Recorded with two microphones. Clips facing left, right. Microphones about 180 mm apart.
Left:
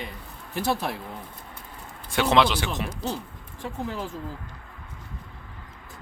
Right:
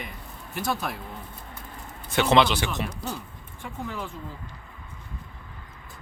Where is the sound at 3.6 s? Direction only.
35° left (ahead or behind).